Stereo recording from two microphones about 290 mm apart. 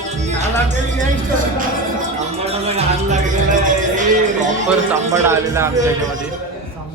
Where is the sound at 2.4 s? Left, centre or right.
Right.